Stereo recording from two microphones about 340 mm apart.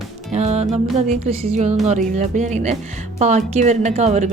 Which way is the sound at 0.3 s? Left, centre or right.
Centre.